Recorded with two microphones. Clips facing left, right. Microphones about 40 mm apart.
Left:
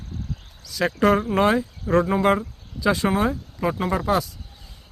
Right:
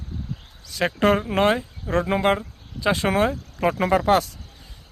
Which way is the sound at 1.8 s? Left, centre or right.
Centre.